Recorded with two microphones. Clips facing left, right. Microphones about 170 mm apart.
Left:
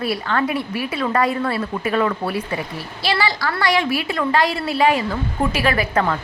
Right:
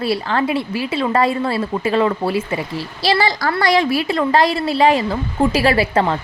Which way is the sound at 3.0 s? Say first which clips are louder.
Right 4 dB; 35° right (ahead or behind).